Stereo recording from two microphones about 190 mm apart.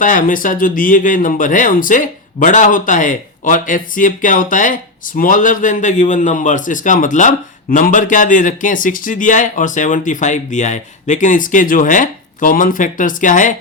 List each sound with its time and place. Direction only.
0.0 s speech: 45° left (ahead or behind)